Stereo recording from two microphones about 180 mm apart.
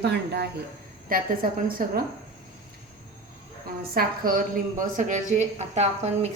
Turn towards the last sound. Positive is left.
turn(degrees=-35)  # may be behind; listen again after turning